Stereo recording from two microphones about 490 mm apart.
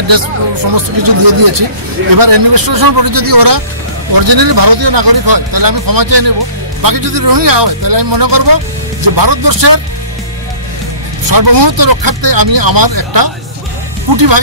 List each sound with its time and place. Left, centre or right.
0.7 s a man's voice: right
11.2 s speech: right